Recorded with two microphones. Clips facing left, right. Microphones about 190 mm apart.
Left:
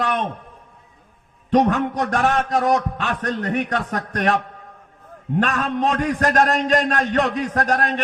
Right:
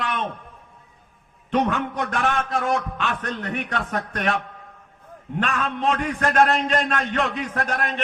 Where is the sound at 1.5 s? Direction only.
40° left (ahead or behind).